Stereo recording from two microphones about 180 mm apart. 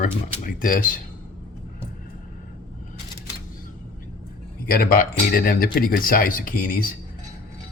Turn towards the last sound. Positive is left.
turn(degrees=55)  # may be behind; listen again after turning